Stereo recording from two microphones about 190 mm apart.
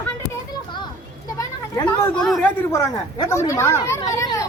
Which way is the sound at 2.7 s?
15° left (ahead or behind).